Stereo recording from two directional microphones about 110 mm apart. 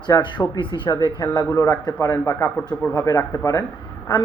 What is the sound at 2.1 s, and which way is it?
A man's voice, 25° left (ahead or behind).